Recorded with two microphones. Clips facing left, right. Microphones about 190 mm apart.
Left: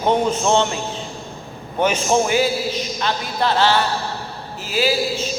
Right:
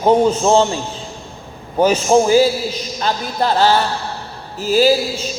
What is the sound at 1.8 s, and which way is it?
Speech, 35° right (ahead or behind).